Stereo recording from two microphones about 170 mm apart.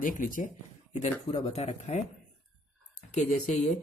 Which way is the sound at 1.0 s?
40° left (ahead or behind).